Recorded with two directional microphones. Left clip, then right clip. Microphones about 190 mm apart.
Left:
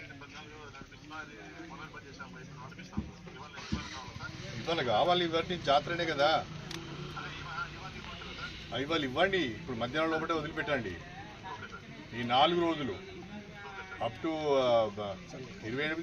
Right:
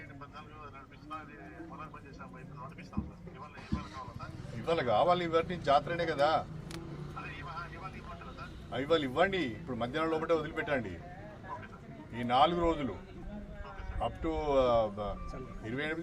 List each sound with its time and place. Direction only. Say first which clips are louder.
4.6 s speech: right 1 dB; 20° right (ahead or behind)
8.7 s speech: right 2 dB; 20° right (ahead or behind)
12.1 s speech: even; 20° right (ahead or behind)
14.0 s speech: even; 20° right (ahead or behind)